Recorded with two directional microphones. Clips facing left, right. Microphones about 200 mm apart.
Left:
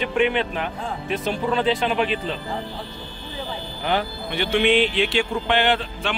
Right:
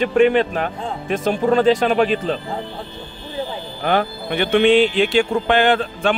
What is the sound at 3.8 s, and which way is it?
A man's voice, 55° right (ahead or behind).